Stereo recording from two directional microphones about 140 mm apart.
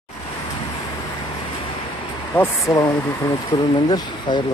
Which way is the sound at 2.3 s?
20° left (ahead or behind).